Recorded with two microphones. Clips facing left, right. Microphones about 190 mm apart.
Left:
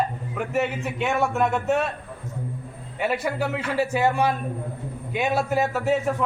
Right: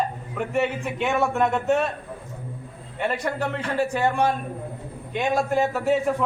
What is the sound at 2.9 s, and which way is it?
A man's voice, 5° left (ahead or behind).